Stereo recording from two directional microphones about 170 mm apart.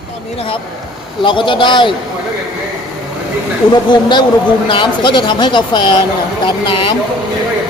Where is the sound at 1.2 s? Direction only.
30° left (ahead or behind).